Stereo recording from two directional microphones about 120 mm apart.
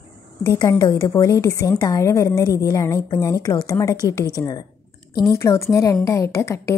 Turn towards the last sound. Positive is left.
turn(degrees=25)  # may be behind; listen again after turning